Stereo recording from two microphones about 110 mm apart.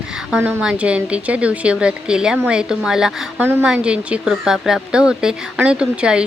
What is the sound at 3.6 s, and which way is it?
Speech, 5° right (ahead or behind).